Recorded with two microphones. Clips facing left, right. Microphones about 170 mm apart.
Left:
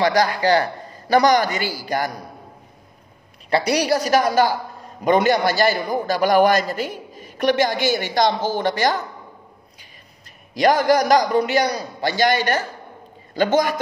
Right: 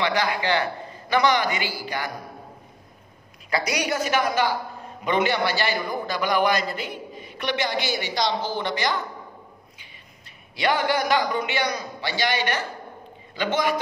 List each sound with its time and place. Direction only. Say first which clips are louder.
0.0 s a man's voice: left 6 dB; 40° left (ahead or behind)
3.4 s a man's voice: left 7 dB; 35° left (ahead or behind)
10.5 s a man's voice: left 7 dB; 40° left (ahead or behind)